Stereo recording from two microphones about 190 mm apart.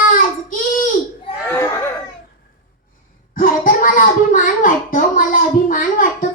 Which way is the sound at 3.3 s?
45° left (ahead or behind).